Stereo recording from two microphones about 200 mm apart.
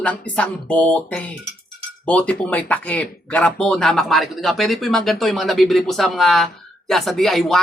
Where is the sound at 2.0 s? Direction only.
5° left (ahead or behind).